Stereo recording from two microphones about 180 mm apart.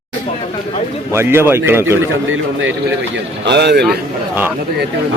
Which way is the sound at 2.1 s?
90° right.